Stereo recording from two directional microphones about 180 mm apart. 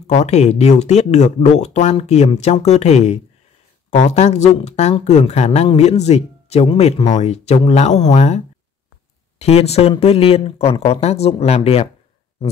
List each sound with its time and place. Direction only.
0.0 s speech: 40° left (ahead or behind)
9.4 s speech: 35° left (ahead or behind)